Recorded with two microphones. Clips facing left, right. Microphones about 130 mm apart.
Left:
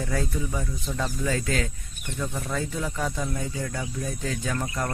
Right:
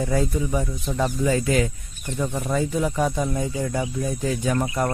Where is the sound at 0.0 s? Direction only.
15° right (ahead or behind).